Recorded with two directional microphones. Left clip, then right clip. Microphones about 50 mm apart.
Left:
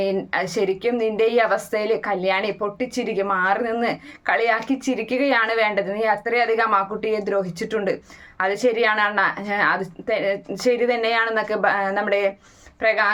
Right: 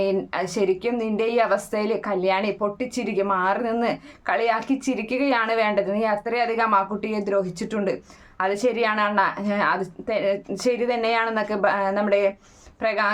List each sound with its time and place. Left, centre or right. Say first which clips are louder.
0.0 s a woman's voice: left 1 dB; right